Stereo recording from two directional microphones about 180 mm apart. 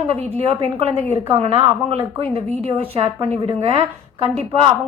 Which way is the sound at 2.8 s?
30° right (ahead or behind).